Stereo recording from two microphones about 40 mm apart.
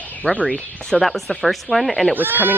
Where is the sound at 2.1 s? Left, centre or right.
Right.